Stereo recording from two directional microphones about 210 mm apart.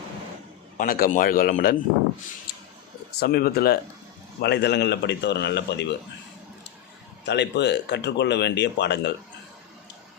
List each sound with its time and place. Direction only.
0.8 s a man's voice: 40° left (ahead or behind)
3.2 s speech: 45° left (ahead or behind)
7.3 s speech: 55° left (ahead or behind)